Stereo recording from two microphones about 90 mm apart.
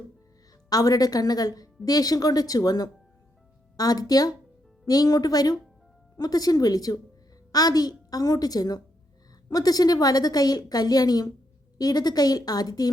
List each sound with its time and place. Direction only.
0.7 s a woman's voice: 45° left (ahead or behind)